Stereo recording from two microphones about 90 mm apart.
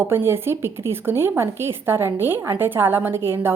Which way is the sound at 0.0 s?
25° right (ahead or behind).